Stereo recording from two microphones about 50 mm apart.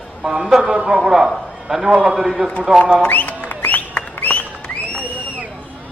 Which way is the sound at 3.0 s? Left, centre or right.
Left.